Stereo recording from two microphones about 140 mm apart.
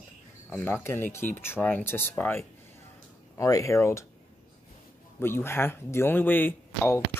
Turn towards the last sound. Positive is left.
turn(degrees=15)  # may be behind; listen again after turning